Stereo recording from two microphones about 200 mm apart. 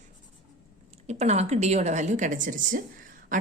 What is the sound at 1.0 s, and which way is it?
A woman's voice, 35° right (ahead or behind).